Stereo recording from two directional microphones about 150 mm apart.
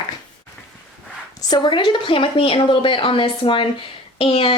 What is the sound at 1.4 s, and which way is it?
A woman's voice, 30° left (ahead or behind).